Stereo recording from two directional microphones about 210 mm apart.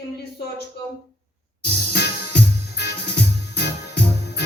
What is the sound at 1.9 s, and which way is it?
Music, 50° left (ahead or behind).